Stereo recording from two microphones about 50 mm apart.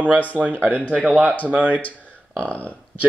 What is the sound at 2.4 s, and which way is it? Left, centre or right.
Speech, left.